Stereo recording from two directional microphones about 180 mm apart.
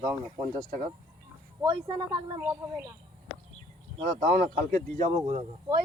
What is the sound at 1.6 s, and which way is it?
Speech, 25° right (ahead or behind).